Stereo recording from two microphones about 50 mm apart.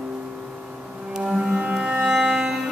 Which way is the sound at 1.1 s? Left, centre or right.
Centre.